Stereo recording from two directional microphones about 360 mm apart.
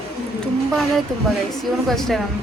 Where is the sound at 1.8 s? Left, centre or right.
Centre.